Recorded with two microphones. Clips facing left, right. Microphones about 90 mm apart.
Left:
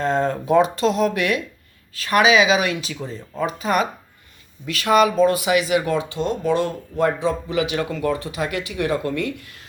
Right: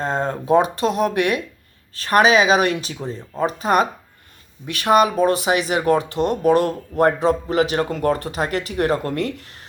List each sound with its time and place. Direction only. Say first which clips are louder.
0.0 s speech: left 2 dB; 35° right (ahead or behind)
2.0 s speech: right 1 dB; 40° right (ahead or behind)